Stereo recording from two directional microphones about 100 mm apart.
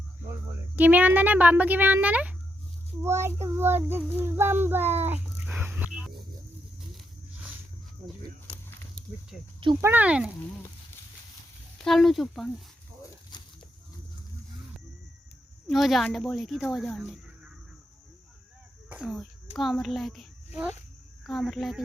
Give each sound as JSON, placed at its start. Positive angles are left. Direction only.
{"t": 0.8, "sound": "a child's voice", "side_deg": -15}
{"t": 3.0, "sound": "child singing", "side_deg": -25}
{"t": 9.0, "sound": "snake", "side_deg": 10}
{"t": 9.3, "sound": "speech", "side_deg": -5}
{"t": 9.8, "sound": "a child's voice", "side_deg": -15}
{"t": 11.8, "sound": "speech", "side_deg": 5}
{"t": 13.3, "sound": "livestock", "side_deg": 45}
{"t": 15.6, "sound": "speech", "side_deg": 0}
{"t": 17.0, "sound": "a sound", "side_deg": -5}
{"t": 18.9, "sound": "speech", "side_deg": -10}
{"t": 19.5, "sound": "speech", "side_deg": 0}
{"t": 20.5, "sound": "speech", "side_deg": -15}
{"t": 21.2, "sound": "speech", "side_deg": 0}